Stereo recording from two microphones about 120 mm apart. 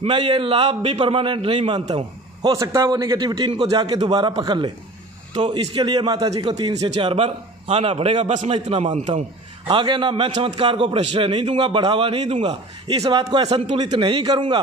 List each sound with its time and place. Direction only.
0.0 s a man's voice: 45° right (ahead or behind)
2.6 s a man's voice: 25° right (ahead or behind)
3.2 s a man's voice: 40° right (ahead or behind)
7.0 s a man's voice: 55° right (ahead or behind)
13.1 s a man's voice: 35° right (ahead or behind)